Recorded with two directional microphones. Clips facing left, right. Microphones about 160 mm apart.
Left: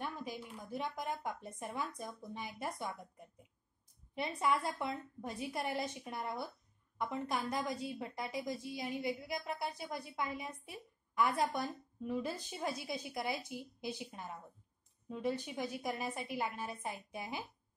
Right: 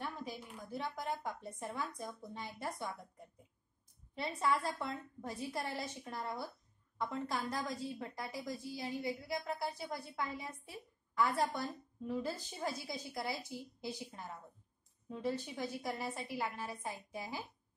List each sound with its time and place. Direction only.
0.0 s a woman's voice: 15° left (ahead or behind)
4.1 s a woman's voice: 15° left (ahead or behind)